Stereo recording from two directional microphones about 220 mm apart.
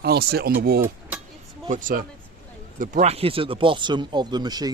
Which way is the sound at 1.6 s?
35° right (ahead or behind).